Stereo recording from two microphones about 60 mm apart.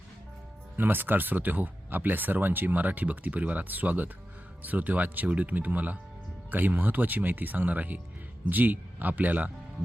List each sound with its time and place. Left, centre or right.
0.8 s speech: right